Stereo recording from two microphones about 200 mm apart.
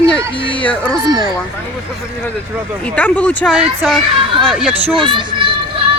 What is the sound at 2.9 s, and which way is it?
Speech, 5° left (ahead or behind).